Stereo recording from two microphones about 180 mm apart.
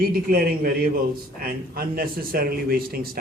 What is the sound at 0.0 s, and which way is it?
A man's voice, 55° right (ahead or behind).